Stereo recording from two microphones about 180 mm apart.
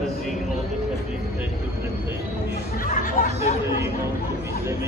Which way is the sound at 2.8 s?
50° left (ahead or behind).